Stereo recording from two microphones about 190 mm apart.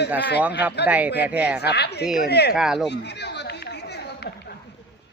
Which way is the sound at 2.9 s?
65° left (ahead or behind).